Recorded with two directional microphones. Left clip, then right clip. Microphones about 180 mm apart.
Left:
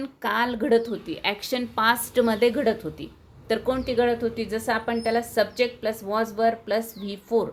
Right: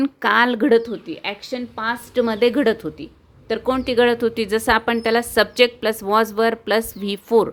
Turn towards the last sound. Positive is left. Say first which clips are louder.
# right 7 dB
turn(degrees=-45)  # may be behind; listen again after turning